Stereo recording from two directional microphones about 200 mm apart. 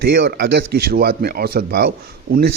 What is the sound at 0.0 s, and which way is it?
A man's voice, 55° right (ahead or behind).